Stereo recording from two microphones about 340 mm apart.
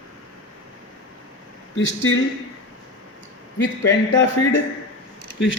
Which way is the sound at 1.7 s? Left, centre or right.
Left.